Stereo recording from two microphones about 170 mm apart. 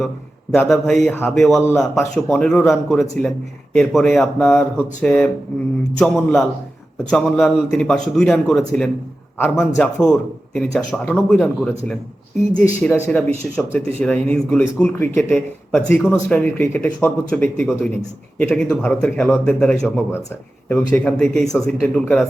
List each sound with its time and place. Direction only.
0.5 s a man's voice: 5° left (ahead or behind)
13.1 s a man's voice: 5° left (ahead or behind)